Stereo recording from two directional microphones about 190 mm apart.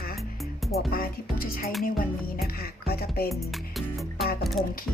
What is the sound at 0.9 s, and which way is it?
Speech, 50° left (ahead or behind).